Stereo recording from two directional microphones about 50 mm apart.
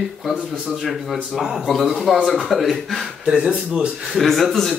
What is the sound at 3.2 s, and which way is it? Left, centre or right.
Speech, centre.